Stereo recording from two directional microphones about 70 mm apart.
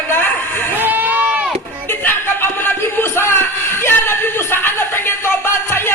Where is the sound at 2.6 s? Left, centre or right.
Left.